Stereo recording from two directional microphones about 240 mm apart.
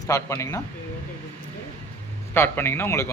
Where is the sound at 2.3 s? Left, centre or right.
Centre.